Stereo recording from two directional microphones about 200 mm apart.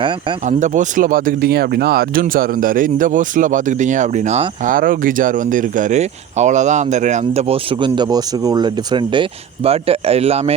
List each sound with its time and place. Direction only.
0.4 s speech: 40° right (ahead or behind)